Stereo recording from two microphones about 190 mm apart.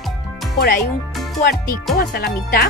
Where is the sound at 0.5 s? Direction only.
55° left (ahead or behind).